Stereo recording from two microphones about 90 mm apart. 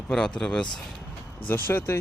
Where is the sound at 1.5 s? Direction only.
25° left (ahead or behind).